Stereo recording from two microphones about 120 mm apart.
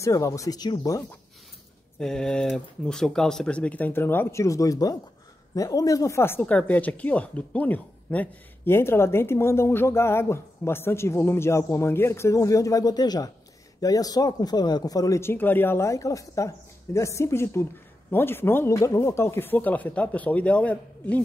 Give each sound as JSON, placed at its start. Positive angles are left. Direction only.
{"t": 0.0, "sound": "speech", "side_deg": 25}
{"t": 2.0, "sound": "speech", "side_deg": 5}